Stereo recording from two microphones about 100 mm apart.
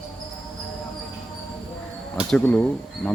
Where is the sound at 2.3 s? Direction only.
15° left (ahead or behind).